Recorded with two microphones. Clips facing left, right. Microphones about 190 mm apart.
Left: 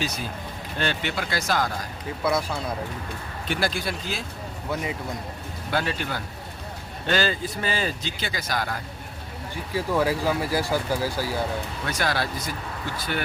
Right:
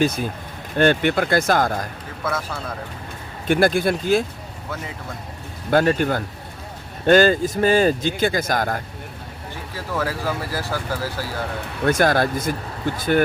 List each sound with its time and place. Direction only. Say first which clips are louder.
0.0 s speech: right 9 dB; 55° right (ahead or behind)
2.2 s speech: left 2 dB; 15° left (ahead or behind)
3.5 s speech: right 10 dB; 55° right (ahead or behind)
4.7 s speech: left 3 dB; 15° left (ahead or behind)
5.7 s speech: right 10 dB; 50° right (ahead or behind)
9.7 s speech: left 3 dB; 15° left (ahead or behind)
11.9 s speech: right 10 dB; 50° right (ahead or behind)